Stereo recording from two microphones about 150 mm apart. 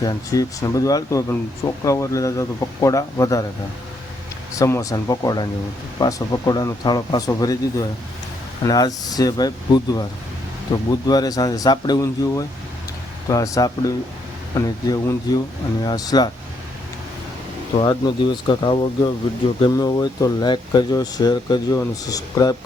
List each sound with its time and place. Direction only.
0.0 s speech: 25° left (ahead or behind)
4.5 s speech: 20° left (ahead or behind)
17.7 s speech: 30° left (ahead or behind)